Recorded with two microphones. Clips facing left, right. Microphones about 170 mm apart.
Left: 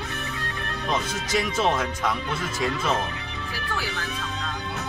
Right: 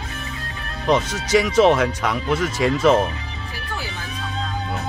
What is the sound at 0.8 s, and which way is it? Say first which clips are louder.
Speech: right 8 dB; 80° right.